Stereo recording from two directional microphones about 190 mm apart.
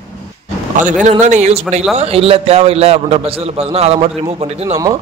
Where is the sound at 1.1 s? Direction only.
40° right (ahead or behind).